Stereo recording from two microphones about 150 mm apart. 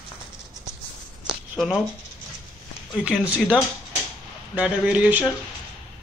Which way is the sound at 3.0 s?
5° right (ahead or behind).